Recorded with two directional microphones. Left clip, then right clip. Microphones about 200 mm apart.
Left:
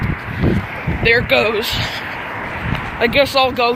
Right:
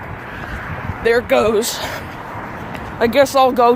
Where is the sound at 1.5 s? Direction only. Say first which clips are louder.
Right 1 dB; 35° right (ahead or behind).